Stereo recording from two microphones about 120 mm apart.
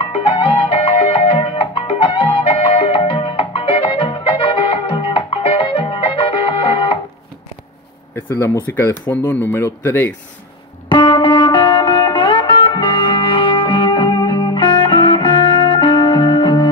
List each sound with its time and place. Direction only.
0.0 s music: 50° left (ahead or behind)
8.2 s speech: 20° left (ahead or behind)
10.9 s music: 40° left (ahead or behind)